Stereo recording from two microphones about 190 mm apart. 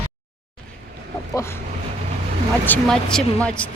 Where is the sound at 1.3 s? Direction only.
15° left (ahead or behind).